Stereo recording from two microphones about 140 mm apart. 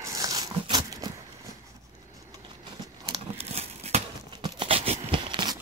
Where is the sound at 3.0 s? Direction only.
45° right (ahead or behind).